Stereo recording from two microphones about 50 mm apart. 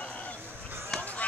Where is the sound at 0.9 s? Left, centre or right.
Centre.